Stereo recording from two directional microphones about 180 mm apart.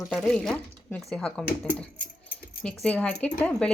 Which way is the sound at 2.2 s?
5° left (ahead or behind).